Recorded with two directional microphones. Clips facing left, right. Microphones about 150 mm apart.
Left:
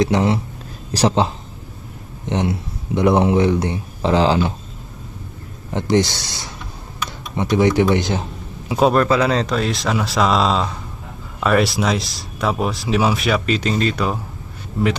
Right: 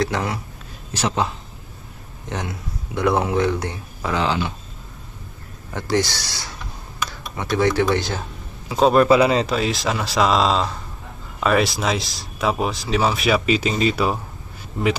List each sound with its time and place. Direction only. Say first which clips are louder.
0.0 s speech: left 6 dB; 20° left (ahead or behind)
5.7 s speech: left 4 dB; 20° left (ahead or behind)
8.9 s speech: right 4 dB; 10° right (ahead or behind)